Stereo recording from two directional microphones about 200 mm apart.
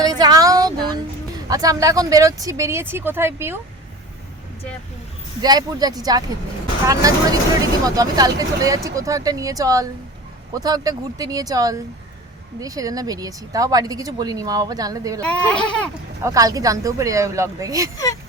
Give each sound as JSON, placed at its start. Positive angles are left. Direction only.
{"t": 0.0, "sound": "a sound", "side_deg": -20}
{"t": 1.5, "sound": "speech", "side_deg": -15}
{"t": 5.4, "sound": "speech", "side_deg": -20}
{"t": 15.2, "sound": "speech", "side_deg": 5}
{"t": 16.2, "sound": "speech", "side_deg": -15}
{"t": 17.9, "sound": "speech", "side_deg": 15}